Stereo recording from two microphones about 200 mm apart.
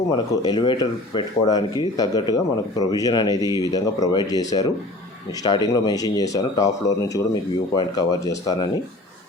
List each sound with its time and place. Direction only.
0.1 s speech: 20° left (ahead or behind)